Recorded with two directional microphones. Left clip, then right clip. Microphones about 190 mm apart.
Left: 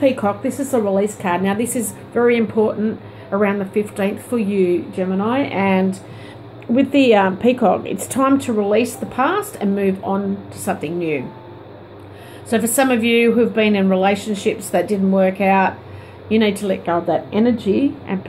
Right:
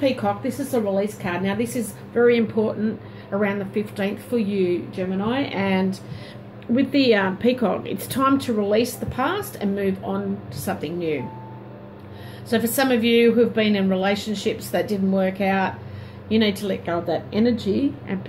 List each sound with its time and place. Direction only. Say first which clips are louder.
0.0 s a woman's voice: left 5 dB; 20° left (ahead or behind)
12.4 s a woman's voice: left 4 dB; 15° left (ahead or behind)